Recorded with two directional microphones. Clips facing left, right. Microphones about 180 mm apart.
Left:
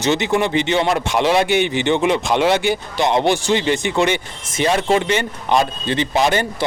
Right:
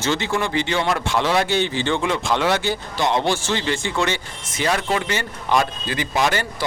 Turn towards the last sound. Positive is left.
turn(degrees=20)  # may be behind; listen again after turning